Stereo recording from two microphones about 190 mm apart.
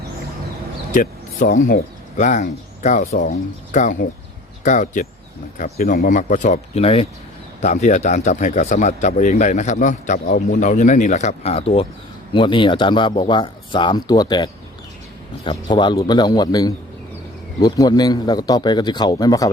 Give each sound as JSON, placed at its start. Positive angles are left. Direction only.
{"t": 0.9, "sound": "speech", "side_deg": 45}